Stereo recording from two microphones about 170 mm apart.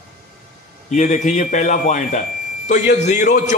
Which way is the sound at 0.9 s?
50° left (ahead or behind).